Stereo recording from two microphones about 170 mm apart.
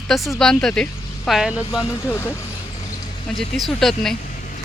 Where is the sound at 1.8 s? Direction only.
15° left (ahead or behind).